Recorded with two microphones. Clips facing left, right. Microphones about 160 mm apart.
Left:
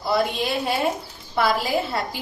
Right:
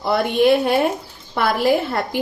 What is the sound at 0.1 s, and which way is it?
A woman's voice, 60° right (ahead or behind).